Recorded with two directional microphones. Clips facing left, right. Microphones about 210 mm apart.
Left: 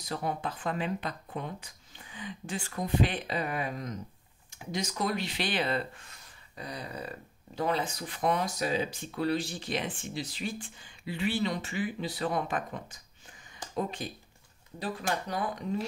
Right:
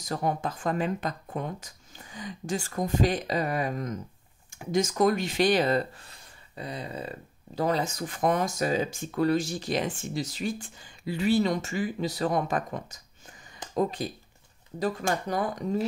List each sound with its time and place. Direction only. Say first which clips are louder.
0.0 s speech: right 4 dB; 45° right (ahead or behind)
6.5 s a sound: right 4 dB; 25° right (ahead or behind)
7.5 s speech: right 3 dB; 40° right (ahead or behind)
15.2 s speech: right 4 dB; 45° right (ahead or behind)